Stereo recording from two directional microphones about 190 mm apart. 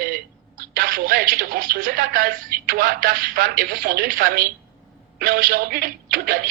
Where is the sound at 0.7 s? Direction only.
50° right (ahead or behind).